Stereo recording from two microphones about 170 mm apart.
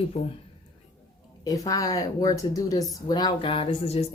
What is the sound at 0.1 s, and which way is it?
Speech, 35° left (ahead or behind).